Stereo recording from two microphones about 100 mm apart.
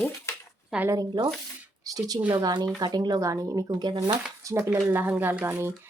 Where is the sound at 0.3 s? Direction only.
25° left (ahead or behind).